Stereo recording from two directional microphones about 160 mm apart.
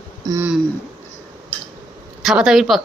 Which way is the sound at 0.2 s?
25° right (ahead or behind).